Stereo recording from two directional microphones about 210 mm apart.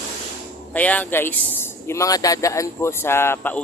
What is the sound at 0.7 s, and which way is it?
A man's voice, 5° left (ahead or behind).